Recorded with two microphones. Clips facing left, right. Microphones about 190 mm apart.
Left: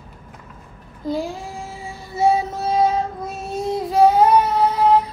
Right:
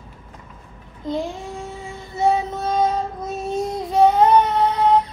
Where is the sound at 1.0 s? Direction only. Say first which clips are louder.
Left 1 dB; centre (ahead or behind).